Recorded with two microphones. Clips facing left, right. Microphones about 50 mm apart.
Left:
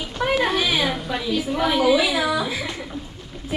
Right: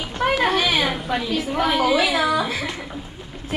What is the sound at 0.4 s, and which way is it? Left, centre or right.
A woman's voice, centre.